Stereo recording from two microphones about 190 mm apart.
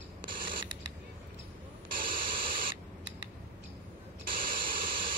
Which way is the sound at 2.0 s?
50° right (ahead or behind).